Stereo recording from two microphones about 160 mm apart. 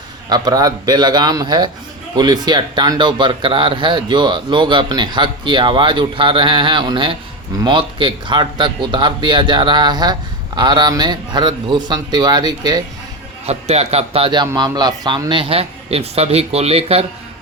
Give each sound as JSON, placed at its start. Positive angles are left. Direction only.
{"t": 0.3, "sound": "speech", "side_deg": -25}
{"t": 13.4, "sound": "speech", "side_deg": -40}